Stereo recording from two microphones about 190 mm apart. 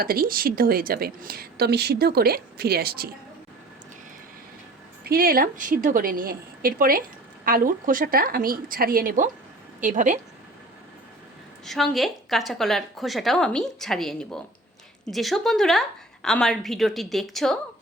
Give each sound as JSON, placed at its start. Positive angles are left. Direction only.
{"t": 0.0, "sound": "speech", "side_deg": -50}
{"t": 5.0, "sound": "speech", "side_deg": -50}
{"t": 11.6, "sound": "a woman's voice", "side_deg": 0}